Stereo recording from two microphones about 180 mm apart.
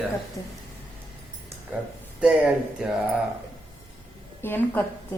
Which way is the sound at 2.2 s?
5° right (ahead or behind).